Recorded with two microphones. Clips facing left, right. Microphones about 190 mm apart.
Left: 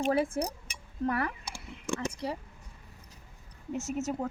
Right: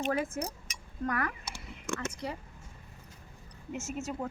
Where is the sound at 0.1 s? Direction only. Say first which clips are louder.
Left 4 dB; 35° left (ahead or behind).